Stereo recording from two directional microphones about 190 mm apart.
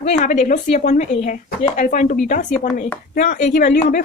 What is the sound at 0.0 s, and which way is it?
Speech, 35° left (ahead or behind).